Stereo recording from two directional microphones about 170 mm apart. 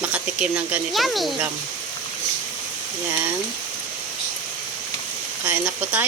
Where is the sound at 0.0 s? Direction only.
5° right (ahead or behind).